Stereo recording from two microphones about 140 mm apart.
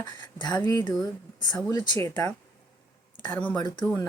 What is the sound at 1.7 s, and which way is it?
Speech, 30° left (ahead or behind).